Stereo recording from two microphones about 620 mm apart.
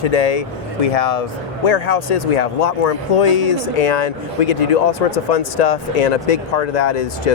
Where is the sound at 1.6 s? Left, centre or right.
Left.